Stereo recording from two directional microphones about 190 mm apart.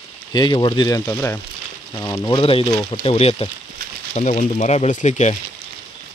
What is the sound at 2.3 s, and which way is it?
Speech, 30° left (ahead or behind).